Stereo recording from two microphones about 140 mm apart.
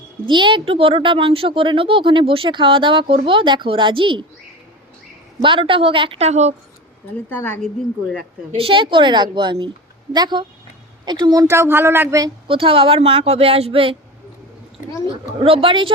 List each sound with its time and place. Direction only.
0.3 s a woman's voice: 35° right (ahead or behind)
5.4 s a woman's voice: 35° right (ahead or behind)
7.3 s speech: 10° left (ahead or behind)
8.5 s a woman's voice: 40° right (ahead or behind); by 12.3 s 20° right (ahead or behind)
12.5 s a woman's voice: 40° right (ahead or behind)
15.0 s a woman's voice: 40° right (ahead or behind)